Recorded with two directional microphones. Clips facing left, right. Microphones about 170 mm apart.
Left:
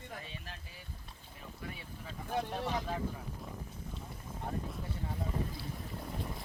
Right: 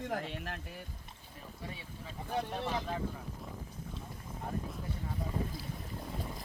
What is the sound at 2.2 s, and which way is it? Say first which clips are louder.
Speech: even; centre (ahead or behind).